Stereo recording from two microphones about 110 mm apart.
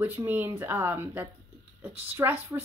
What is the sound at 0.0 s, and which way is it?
A woman's voice, 20° right (ahead or behind).